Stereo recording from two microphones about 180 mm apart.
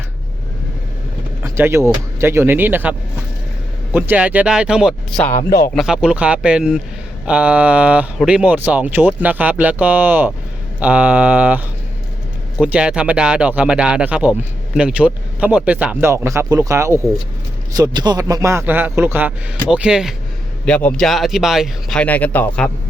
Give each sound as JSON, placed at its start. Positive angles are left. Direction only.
{"t": 1.5, "sound": "speech", "side_deg": -15}
{"t": 3.9, "sound": "speech", "side_deg": -10}
{"t": 5.3, "sound": "a man's voice", "side_deg": 45}
{"t": 5.7, "sound": "speech", "side_deg": -5}
{"t": 20.7, "sound": "speech", "side_deg": 5}